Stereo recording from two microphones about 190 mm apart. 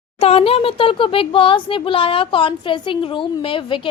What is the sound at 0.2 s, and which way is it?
A child's voice, 30° left (ahead or behind).